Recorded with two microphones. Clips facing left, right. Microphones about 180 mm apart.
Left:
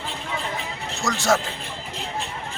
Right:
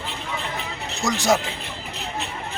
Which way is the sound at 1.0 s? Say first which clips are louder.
Right 1 dB; 15° right (ahead or behind).